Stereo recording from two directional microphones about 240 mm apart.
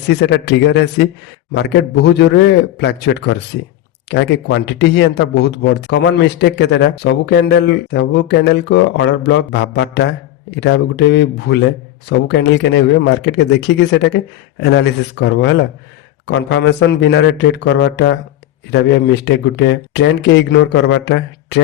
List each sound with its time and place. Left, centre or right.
0.1 s speech: left